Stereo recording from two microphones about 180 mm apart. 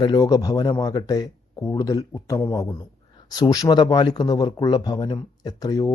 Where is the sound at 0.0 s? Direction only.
20° left (ahead or behind).